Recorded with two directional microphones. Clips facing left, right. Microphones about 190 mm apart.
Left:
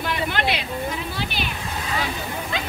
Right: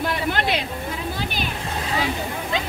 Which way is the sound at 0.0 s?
45° right (ahead or behind).